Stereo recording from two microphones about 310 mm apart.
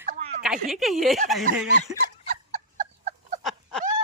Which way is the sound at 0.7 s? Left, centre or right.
Centre.